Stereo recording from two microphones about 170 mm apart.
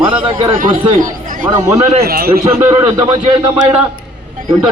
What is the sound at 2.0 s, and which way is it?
Speech, 60° right (ahead or behind).